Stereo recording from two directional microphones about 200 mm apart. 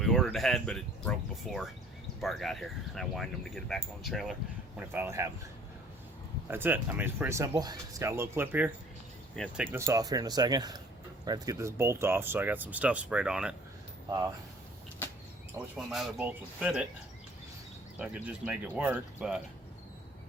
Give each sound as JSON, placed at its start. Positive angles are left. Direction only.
{"t": 0.0, "sound": "speech", "side_deg": 0}
{"t": 6.5, "sound": "speech", "side_deg": -10}
{"t": 9.3, "sound": "speech", "side_deg": 5}
{"t": 9.6, "sound": "speech", "side_deg": -15}
{"t": 15.5, "sound": "speech", "side_deg": -5}
{"t": 18.0, "sound": "speech", "side_deg": -5}